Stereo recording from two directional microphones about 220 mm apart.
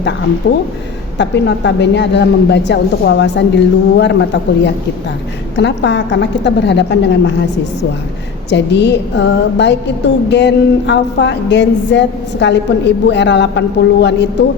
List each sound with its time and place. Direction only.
0.4 s music: 45° left (ahead or behind)
8.4 s music: 50° left (ahead or behind)